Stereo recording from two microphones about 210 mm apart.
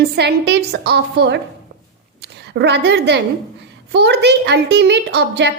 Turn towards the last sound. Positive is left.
turn(degrees=-55)  # may be behind; listen again after turning